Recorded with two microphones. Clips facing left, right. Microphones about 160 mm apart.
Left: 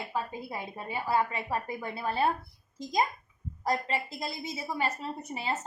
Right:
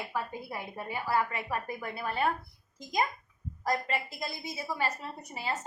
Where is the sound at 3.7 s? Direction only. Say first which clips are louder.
Left 1 dB; 25° left (ahead or behind).